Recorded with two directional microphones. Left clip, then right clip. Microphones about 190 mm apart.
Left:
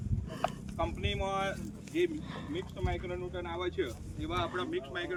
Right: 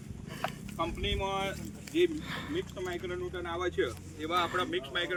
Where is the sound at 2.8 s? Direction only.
45° left (ahead or behind).